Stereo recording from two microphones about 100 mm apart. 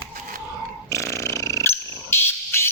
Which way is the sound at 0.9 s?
30° left (ahead or behind).